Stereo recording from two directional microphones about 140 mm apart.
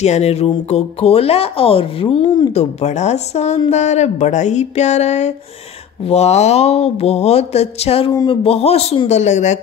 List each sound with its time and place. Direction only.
0.0 s speech: 50° left (ahead or behind); by 2.5 s 35° left (ahead or behind)
2.5 s speech: 50° left (ahead or behind)
8.1 s speech: 30° left (ahead or behind)
8.5 s speech: 45° left (ahead or behind)